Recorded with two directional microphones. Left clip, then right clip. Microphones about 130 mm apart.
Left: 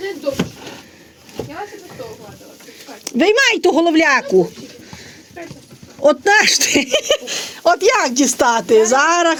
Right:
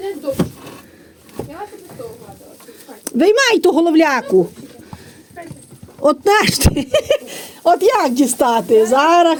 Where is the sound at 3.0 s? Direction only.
40° right (ahead or behind).